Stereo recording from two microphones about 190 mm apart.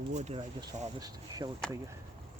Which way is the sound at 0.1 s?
35° right (ahead or behind).